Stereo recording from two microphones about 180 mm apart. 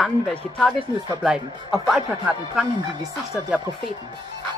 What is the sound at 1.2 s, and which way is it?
Speech, centre (ahead or behind).